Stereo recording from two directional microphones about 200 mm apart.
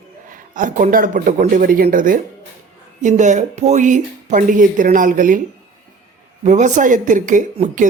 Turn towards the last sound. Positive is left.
turn(degrees=-40)  # may be behind; listen again after turning